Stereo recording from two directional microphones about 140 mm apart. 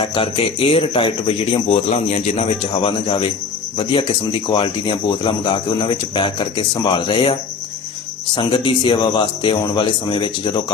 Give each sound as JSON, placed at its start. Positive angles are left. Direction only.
{"t": 0.0, "sound": "speech", "side_deg": 40}
{"t": 8.4, "sound": "speech", "side_deg": 35}